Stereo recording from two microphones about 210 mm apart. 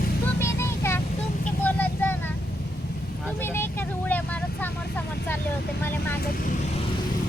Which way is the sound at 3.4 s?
10° left (ahead or behind).